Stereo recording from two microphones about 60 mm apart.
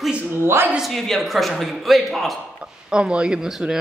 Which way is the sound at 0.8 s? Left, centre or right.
Centre.